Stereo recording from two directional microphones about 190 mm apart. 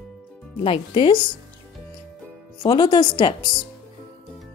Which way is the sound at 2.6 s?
25° left (ahead or behind).